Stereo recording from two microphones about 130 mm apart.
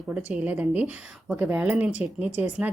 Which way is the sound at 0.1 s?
10° right (ahead or behind).